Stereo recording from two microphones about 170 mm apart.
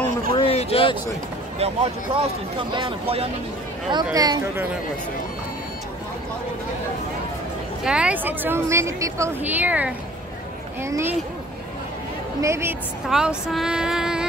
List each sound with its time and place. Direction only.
0.4 s a sound: 35° left (ahead or behind)
1.6 s speech: 40° right (ahead or behind); by 4.6 s 20° right (ahead or behind)
7.8 s a woman's voice: 5° right (ahead or behind)
12.4 s a woman's voice: 15° right (ahead or behind)
13.1 s speech: 5° right (ahead or behind)